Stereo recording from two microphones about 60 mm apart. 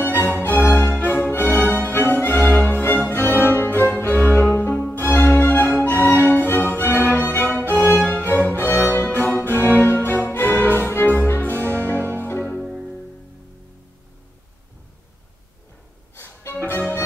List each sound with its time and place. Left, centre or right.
0.0 s music: left
7.6 s music: right
8.0 s music: left
12.6 s music: centre
16.2 s music: left